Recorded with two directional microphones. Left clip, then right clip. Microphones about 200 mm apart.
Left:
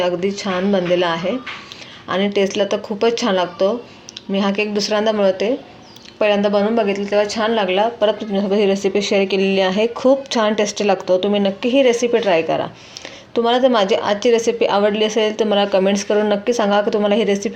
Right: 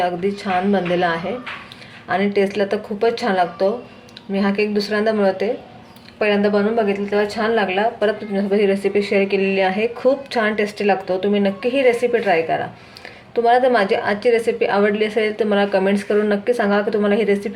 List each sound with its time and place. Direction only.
0.0 s speech: 35° left (ahead or behind)